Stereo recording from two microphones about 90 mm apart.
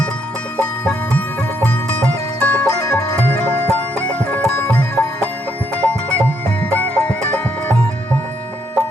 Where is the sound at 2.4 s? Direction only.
15° left (ahead or behind).